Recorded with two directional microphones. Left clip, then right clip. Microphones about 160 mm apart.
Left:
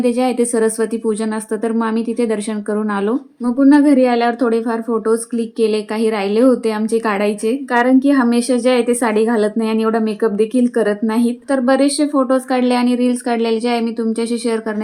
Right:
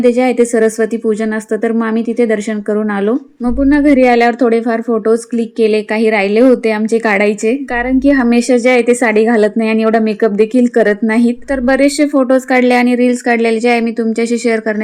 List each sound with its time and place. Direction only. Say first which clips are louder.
0.0 s a woman's voice: right 6 dB; 20° right (ahead or behind)